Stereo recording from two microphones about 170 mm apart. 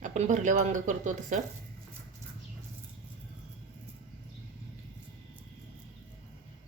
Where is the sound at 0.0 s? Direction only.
45° right (ahead or behind).